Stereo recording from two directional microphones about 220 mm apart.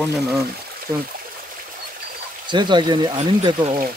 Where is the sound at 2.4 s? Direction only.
20° right (ahead or behind).